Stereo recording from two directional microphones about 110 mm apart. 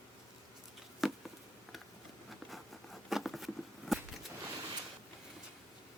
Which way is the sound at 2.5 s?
Centre (ahead or behind).